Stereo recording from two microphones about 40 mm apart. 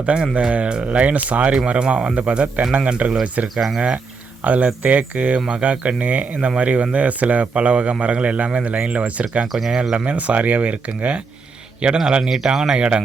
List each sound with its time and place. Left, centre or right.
0.0 s speech: right
3.5 s speech: centre
3.8 s speech: right
9.5 s speech: centre
9.9 s speech: right
11.8 s speech: right
12.2 s speech: centre